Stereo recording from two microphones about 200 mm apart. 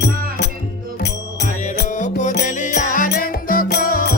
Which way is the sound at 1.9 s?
40° left (ahead or behind).